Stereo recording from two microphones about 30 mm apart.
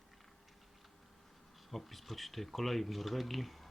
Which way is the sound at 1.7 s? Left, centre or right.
Centre.